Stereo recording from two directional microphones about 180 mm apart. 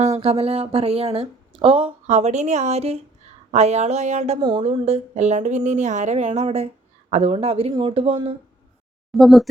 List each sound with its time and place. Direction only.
0.1 s speech: 35° right (ahead or behind)
4.4 s speech: 25° right (ahead or behind)
4.6 s speech: 35° right (ahead or behind)
9.1 s speech: centre (ahead or behind)